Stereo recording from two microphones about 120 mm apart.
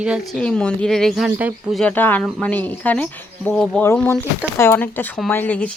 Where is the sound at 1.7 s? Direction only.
10° left (ahead or behind).